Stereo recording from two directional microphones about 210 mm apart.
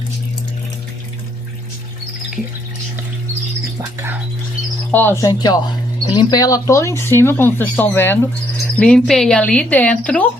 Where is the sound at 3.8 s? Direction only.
10° right (ahead or behind).